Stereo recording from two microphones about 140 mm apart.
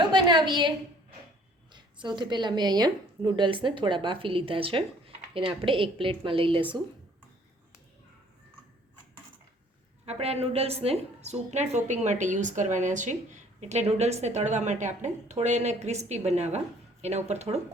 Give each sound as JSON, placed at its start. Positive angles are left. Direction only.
{"t": 0.0, "sound": "a sound", "side_deg": -35}
{"t": 1.7, "sound": "a woman's voice", "side_deg": -35}
{"t": 10.1, "sound": "a woman's voice", "side_deg": -50}